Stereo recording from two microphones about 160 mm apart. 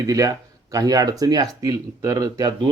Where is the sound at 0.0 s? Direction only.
20° right (ahead or behind).